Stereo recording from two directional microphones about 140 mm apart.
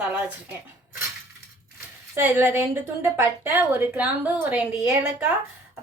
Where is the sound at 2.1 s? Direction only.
15° right (ahead or behind).